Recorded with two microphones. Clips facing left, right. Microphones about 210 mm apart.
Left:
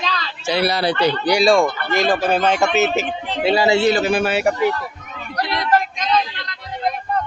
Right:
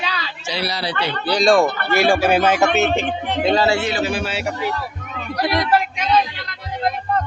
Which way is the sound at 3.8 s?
40° left (ahead or behind).